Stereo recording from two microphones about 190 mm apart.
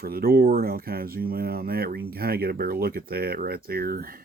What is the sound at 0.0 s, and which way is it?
Speech, 50° right (ahead or behind).